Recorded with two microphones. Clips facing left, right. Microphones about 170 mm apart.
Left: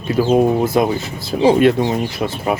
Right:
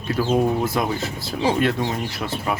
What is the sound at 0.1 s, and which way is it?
Speech, 15° left (ahead or behind).